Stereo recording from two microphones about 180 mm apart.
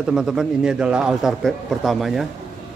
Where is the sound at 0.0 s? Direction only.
Centre (ahead or behind).